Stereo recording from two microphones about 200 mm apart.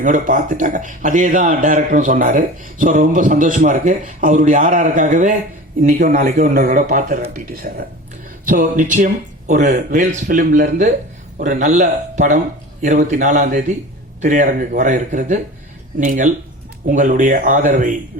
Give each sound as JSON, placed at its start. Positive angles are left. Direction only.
{"t": 0.0, "sound": "speech", "side_deg": -40}